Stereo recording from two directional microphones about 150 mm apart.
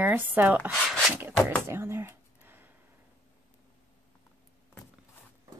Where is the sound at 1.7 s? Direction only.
15° right (ahead or behind).